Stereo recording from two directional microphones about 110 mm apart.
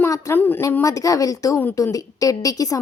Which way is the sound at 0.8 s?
30° left (ahead or behind).